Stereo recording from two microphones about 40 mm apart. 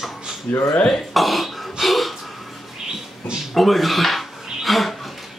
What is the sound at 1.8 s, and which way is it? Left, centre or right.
Gasp, centre.